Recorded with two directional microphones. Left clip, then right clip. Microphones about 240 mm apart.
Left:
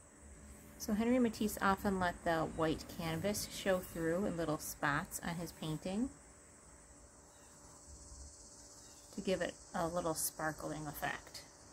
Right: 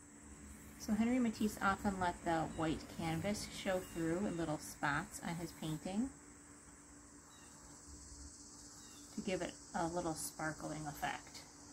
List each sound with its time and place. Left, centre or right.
0.7 s speech: left
9.2 s speech: left